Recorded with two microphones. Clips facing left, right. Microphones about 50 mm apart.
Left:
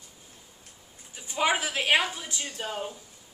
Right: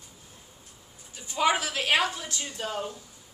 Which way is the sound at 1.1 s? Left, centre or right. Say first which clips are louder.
Right 1 dB; centre.